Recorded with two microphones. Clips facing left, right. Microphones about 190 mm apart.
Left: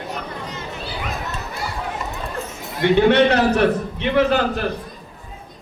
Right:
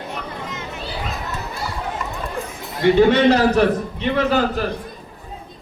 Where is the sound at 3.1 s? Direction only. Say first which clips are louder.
Right 1 dB; 65° left (ahead or behind).